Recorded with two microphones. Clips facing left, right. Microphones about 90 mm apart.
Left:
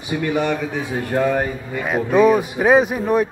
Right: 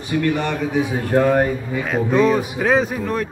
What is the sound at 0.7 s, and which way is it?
Speech, centre (ahead or behind).